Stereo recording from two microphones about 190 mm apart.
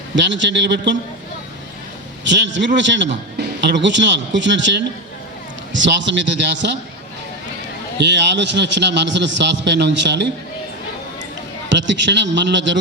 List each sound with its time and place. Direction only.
0.2 s a man's voice: 70° right (ahead or behind)
2.2 s a man's voice: 70° right (ahead or behind)
7.9 s a man's voice: 65° right (ahead or behind)
11.7 s a man's voice: 70° right (ahead or behind)